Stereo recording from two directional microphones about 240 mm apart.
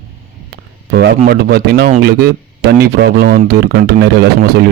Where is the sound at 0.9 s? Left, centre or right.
Right.